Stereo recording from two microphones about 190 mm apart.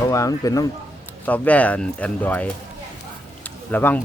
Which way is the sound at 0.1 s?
15° left (ahead or behind).